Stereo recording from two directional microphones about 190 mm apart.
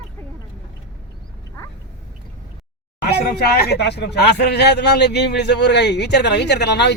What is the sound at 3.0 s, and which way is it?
Speech, 55° left (ahead or behind).